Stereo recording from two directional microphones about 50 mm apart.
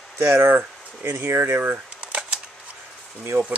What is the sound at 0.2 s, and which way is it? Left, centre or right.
Speech, right.